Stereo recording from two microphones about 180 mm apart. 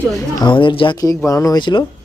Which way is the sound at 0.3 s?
25° left (ahead or behind).